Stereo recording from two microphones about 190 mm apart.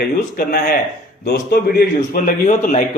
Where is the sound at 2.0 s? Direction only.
45° left (ahead or behind).